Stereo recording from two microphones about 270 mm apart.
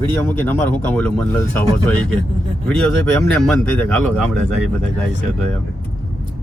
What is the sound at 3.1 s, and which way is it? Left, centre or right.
Speech, centre.